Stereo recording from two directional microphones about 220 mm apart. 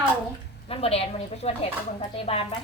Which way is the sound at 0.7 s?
25° left (ahead or behind).